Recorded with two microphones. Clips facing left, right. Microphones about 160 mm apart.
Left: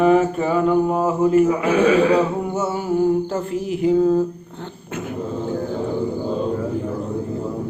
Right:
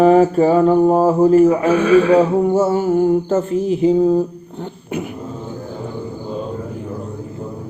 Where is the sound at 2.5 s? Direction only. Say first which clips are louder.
Right 6 dB; 35° right (ahead or behind).